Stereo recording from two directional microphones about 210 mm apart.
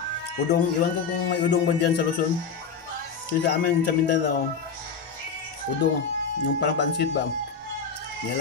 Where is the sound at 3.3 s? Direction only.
55° left (ahead or behind).